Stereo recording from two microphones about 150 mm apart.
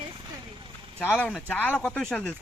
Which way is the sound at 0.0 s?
30° right (ahead or behind).